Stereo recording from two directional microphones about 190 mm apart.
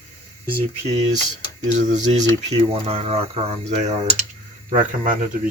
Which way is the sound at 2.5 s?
35° right (ahead or behind).